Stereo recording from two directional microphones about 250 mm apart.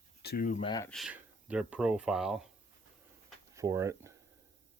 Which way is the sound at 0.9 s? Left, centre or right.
Centre.